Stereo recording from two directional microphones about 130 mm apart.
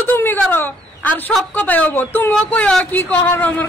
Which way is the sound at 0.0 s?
15° left (ahead or behind).